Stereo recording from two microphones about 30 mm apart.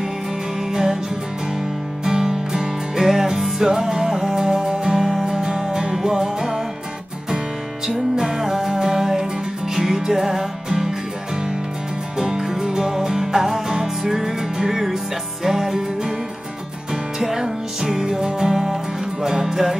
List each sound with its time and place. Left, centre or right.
0.7 s music: centre
2.0 s music: right
3.0 s music: centre
7.8 s music: centre
12.2 s music: centre